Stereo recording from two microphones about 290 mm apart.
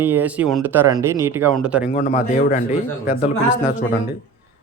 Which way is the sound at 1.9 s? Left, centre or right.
Left.